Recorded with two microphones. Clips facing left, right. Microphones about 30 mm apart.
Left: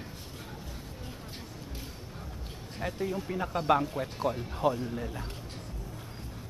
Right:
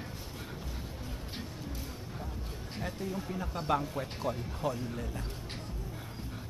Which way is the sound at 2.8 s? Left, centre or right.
Left.